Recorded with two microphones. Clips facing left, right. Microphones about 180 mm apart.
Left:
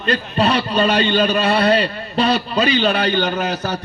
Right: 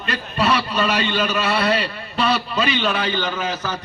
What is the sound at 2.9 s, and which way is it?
Speech, 65° left (ahead or behind).